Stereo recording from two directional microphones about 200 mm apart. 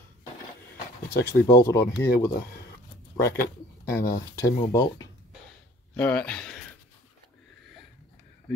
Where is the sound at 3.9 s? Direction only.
50° left (ahead or behind).